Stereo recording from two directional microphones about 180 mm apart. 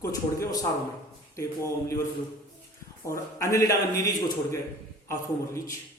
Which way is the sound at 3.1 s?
15° left (ahead or behind).